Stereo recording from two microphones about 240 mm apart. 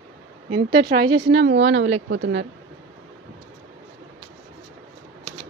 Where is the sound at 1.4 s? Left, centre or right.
Right.